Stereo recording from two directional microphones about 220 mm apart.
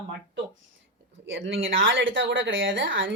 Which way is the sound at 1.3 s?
55° right (ahead or behind).